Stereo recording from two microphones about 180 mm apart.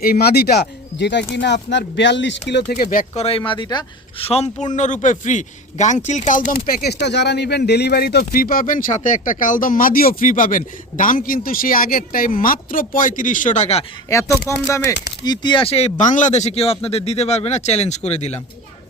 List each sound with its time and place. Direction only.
0.0 s speech: 60° left (ahead or behind); by 2.4 s 80° left
2.5 s speech: 65° left (ahead or behind); by 3.2 s 50° left (ahead or behind)
3.2 s a man's voice: 30° left (ahead or behind)
14.1 s speech: 15° left (ahead or behind); by 18.3 s 35° left (ahead or behind)